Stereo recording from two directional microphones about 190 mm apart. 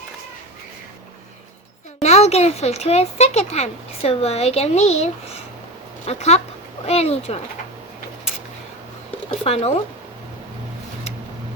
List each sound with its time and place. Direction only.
2.0 s speech: 35° left (ahead or behind)
9.3 s speech: 35° left (ahead or behind)